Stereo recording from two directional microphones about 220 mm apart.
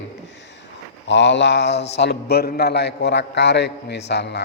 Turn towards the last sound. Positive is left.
turn(degrees=50)  # may be behind; listen again after turning